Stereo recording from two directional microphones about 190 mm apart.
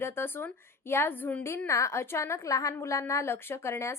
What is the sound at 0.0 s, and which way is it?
A woman's voice, 10° left (ahead or behind).